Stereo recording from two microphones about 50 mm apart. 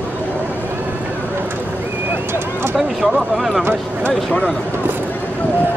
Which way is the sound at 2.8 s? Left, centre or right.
Centre.